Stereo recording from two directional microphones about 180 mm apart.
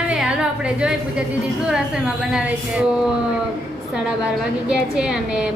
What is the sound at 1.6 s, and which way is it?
A woman's voice, 5° right (ahead or behind).